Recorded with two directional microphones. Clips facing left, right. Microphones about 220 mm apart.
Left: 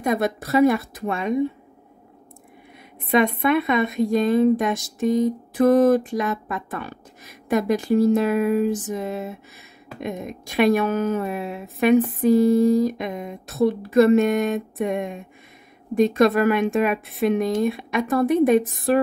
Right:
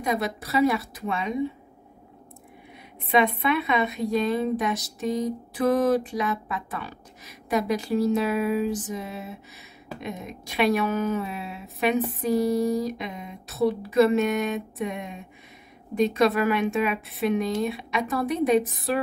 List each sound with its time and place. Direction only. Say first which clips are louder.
0.0 s speech: left 5 dB; 50° left (ahead or behind)
3.1 s speech: left 4 dB; 45° left (ahead or behind)